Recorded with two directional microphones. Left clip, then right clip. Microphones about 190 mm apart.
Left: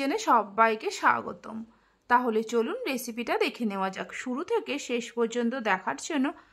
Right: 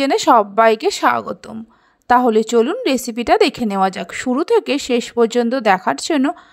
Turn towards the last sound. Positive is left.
turn(degrees=-35)  # may be behind; listen again after turning